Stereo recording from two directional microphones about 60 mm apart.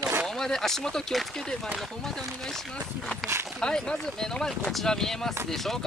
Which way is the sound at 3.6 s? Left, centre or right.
Centre.